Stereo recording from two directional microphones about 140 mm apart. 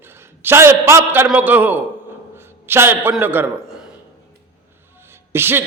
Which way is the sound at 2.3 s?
15° right (ahead or behind).